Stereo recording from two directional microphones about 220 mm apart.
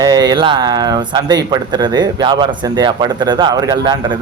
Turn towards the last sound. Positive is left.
turn(degrees=-20)  # may be behind; listen again after turning